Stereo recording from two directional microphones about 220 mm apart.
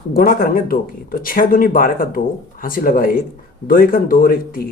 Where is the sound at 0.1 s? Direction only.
40° left (ahead or behind).